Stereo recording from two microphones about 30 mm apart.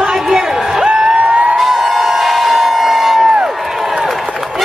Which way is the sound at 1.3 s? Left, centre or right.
Right.